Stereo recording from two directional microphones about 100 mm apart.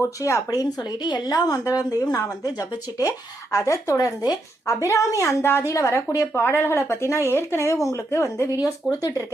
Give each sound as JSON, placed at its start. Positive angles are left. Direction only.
{"t": 0.0, "sound": "a woman's voice", "side_deg": 30}